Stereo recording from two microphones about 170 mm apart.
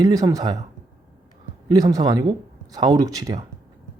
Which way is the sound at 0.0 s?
20° right (ahead or behind).